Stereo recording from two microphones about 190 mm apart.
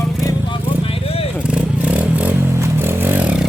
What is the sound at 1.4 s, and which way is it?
Vehicle, 5° right (ahead or behind).